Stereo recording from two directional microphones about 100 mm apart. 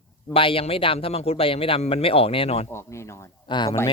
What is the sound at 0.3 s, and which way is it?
Speech, 65° left (ahead or behind).